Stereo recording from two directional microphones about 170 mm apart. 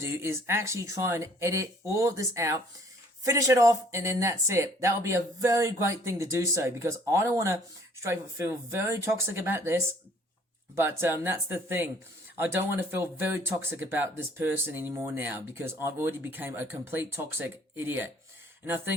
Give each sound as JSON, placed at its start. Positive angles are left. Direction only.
{"t": 0.0, "sound": "speech", "side_deg": -15}